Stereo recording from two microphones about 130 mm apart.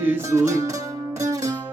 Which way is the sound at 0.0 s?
20° right (ahead or behind).